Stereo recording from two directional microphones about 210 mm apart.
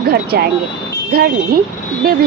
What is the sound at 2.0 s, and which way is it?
Speech, 45° right (ahead or behind).